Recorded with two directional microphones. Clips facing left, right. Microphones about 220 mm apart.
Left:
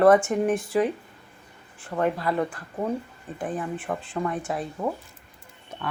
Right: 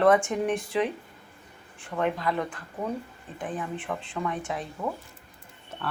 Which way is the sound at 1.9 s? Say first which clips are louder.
Left 3 dB; 40° left (ahead or behind).